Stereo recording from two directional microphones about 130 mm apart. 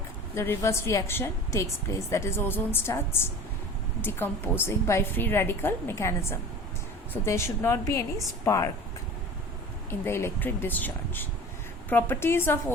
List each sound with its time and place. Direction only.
0.3 s a woman's voice: 20° left (ahead or behind)
9.9 s speech: 20° left (ahead or behind)